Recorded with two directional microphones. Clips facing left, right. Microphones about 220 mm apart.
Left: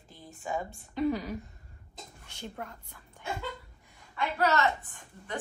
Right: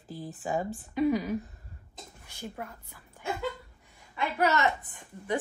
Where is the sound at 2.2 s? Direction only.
5° right (ahead or behind).